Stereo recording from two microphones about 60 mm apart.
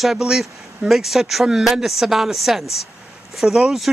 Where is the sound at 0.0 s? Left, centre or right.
Centre.